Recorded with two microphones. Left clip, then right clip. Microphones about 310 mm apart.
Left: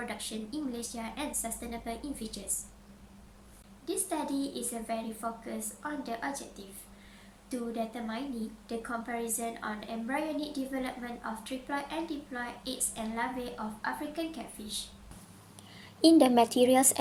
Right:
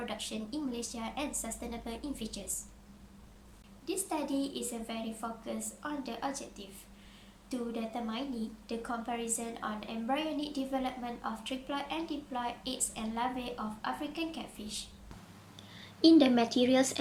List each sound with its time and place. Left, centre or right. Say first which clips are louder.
0.0 s a woman's voice: even; centre
3.8 s a woman's voice: left 1 dB; centre
7.5 s a woman's voice: left 2 dB; centre
16.0 s speech: left 2 dB; left